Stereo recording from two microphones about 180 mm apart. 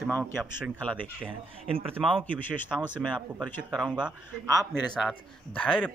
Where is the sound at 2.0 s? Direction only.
Centre (ahead or behind).